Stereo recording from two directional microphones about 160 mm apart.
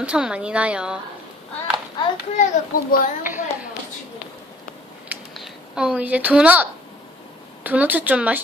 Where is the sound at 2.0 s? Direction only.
25° left (ahead or behind).